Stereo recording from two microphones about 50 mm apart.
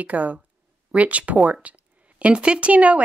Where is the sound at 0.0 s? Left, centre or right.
Right.